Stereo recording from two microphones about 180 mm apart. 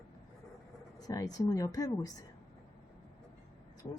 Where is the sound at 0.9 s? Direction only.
20° left (ahead or behind).